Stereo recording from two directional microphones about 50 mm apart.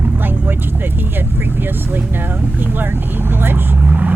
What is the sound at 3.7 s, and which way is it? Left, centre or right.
Vehicle, right.